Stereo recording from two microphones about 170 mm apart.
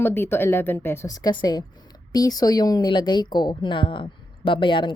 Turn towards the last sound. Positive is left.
turn(degrees=30)  # may be behind; listen again after turning